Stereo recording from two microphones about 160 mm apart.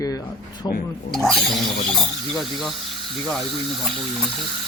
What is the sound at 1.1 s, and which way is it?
Speech, centre (ahead or behind).